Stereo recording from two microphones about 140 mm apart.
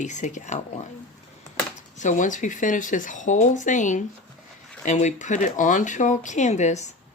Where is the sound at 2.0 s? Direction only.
65° left (ahead or behind).